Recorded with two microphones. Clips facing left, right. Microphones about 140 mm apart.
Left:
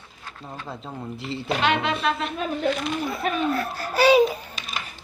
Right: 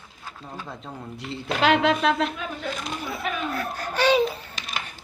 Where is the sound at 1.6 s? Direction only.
90° right.